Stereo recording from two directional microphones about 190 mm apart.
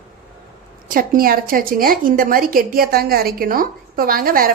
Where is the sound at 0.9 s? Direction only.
50° right (ahead or behind).